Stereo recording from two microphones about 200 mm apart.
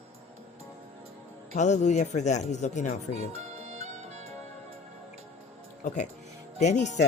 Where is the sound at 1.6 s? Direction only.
35° left (ahead or behind).